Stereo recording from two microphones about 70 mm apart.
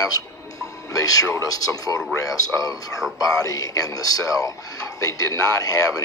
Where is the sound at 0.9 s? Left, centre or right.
Left.